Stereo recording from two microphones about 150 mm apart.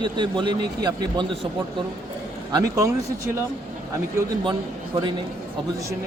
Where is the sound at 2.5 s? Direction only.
20° right (ahead or behind).